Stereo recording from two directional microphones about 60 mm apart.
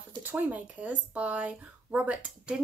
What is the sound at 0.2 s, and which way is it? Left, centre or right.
Speech, right.